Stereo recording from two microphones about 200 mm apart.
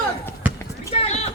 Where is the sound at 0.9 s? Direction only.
30° left (ahead or behind).